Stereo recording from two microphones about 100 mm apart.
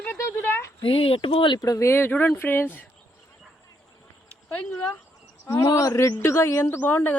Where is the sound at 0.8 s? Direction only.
65° left (ahead or behind).